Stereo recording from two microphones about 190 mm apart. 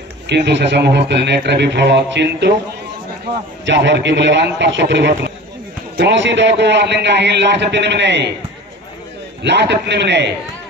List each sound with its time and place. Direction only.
0.3 s a man's voice: 65° right (ahead or behind)
3.6 s a man's voice: 65° right (ahead or behind)
9.4 s a man's voice: 65° right (ahead or behind)